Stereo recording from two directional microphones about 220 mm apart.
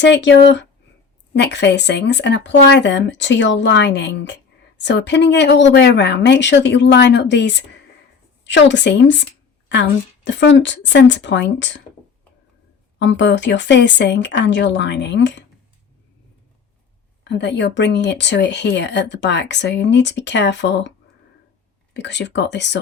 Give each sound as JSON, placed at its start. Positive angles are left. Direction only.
{"t": 0.0, "sound": "speech", "side_deg": 55}
{"t": 10.2, "sound": "speech", "side_deg": 55}
{"t": 13.0, "sound": "speech", "side_deg": 55}
{"t": 17.2, "sound": "speech", "side_deg": 50}
{"t": 21.9, "sound": "speech", "side_deg": 50}